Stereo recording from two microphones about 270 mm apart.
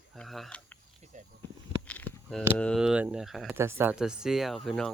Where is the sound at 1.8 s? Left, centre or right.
Centre.